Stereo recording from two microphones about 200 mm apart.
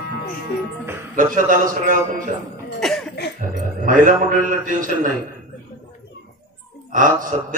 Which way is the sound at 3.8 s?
40° right (ahead or behind).